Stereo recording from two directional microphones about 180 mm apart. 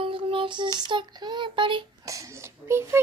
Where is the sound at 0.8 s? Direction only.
25° right (ahead or behind).